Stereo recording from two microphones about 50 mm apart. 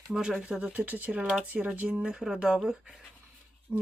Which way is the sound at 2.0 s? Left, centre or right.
Centre.